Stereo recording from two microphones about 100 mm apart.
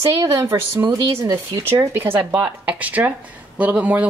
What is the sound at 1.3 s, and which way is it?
A woman's voice, 30° right (ahead or behind).